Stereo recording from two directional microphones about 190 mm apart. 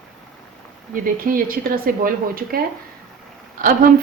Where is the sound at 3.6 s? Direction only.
45° right (ahead or behind).